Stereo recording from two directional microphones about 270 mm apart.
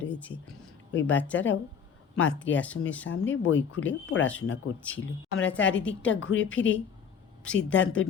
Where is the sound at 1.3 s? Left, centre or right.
Left.